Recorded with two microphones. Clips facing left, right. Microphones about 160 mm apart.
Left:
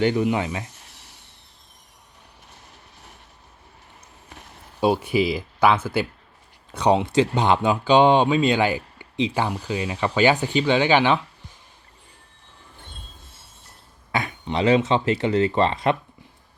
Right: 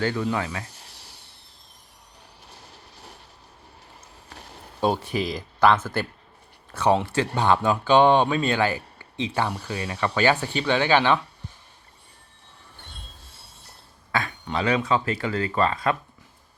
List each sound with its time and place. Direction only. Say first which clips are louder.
0.0 s speech: left 5 dB; 15° left (ahead or behind)
0.6 s a sound: left 1 dB; 35° right (ahead or behind)
2.5 s train: right 3 dB; 35° right (ahead or behind)
4.3 s a sound: right 1 dB; 35° right (ahead or behind)
4.8 s speech: left 4 dB; 10° left (ahead or behind)
14.1 s speech: left 1 dB; 20° left (ahead or behind)